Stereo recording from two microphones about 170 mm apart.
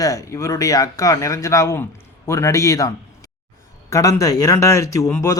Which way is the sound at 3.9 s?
20° left (ahead or behind).